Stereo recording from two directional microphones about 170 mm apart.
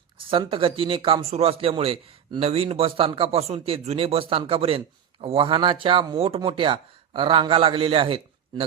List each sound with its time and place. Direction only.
0.3 s a man's voice: 30° right (ahead or behind)